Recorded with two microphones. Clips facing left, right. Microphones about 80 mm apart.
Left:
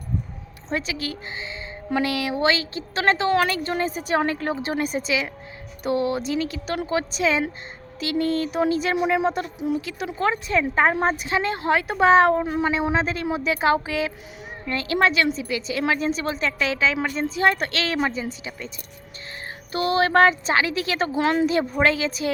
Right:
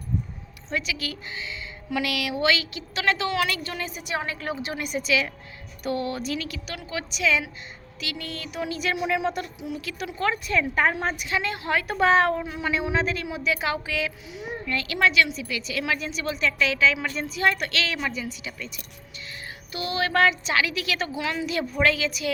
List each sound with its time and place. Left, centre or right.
0.7 s a woman's voice: left
10.1 s a woman's voice: left
12.4 s a woman's voice: left
19.7 s speech: left
21.5 s speech: left